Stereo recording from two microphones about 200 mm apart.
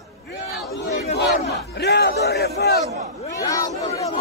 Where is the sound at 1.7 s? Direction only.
55° left (ahead or behind).